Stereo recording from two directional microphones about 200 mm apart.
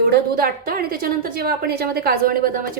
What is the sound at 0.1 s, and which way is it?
A woman's voice, 45° right (ahead or behind).